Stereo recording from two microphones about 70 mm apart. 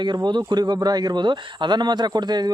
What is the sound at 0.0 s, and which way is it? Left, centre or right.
A man's voice, right.